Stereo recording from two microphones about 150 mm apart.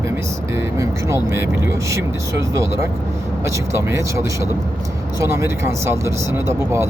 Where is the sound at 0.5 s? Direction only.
20° right (ahead or behind).